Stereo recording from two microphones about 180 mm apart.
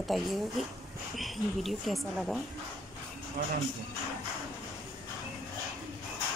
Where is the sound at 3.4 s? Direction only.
60° right (ahead or behind).